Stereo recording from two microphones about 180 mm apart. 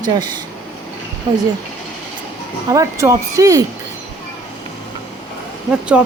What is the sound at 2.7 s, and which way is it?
Speech, 20° right (ahead or behind).